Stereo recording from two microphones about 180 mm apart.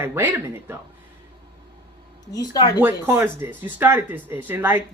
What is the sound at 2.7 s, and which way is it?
Speech, 10° right (ahead or behind).